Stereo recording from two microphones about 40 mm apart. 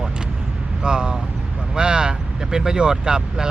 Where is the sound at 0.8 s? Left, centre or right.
Right.